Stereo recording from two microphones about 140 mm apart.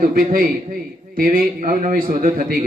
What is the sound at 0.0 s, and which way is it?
A man's voice, 80° right.